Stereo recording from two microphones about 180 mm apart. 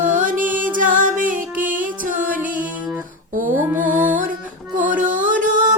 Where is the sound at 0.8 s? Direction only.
50° right (ahead or behind).